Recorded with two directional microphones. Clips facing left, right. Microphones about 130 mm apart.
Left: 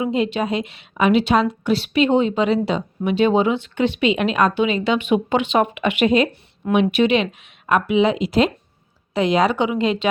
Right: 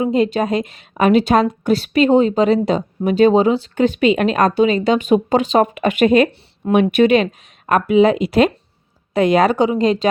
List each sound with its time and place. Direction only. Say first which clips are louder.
0.0 s a woman's voice: right 4 dB; 40° right (ahead or behind)